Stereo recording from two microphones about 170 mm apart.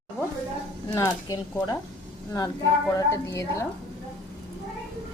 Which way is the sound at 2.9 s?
15° left (ahead or behind).